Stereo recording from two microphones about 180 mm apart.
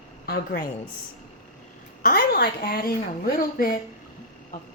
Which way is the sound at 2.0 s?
55° left (ahead or behind).